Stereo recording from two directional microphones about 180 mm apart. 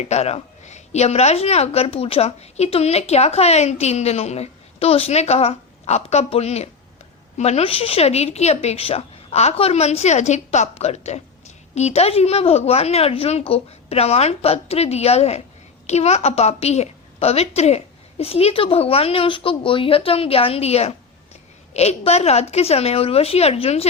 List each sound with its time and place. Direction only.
0.0 s speech: 40° left (ahead or behind)